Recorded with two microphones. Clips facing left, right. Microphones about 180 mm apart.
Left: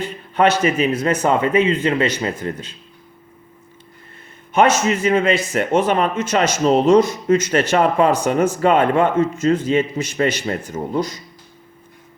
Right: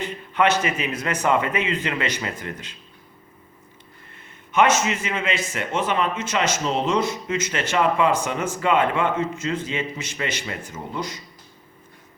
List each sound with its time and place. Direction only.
0.3 s a man's voice: 35° left (ahead or behind)
4.9 s a man's voice: 40° left (ahead or behind)